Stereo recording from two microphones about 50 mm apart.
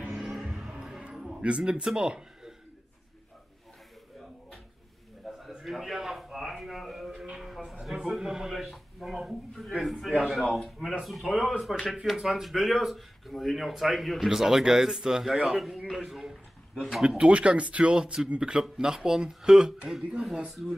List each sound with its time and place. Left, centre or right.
0.1 s music: centre
0.7 s music: centre
1.4 s speech: right
5.2 s a sound: centre
7.8 s speech: centre
11.3 s speech: centre
17.2 s speech: right
20.2 s speech: centre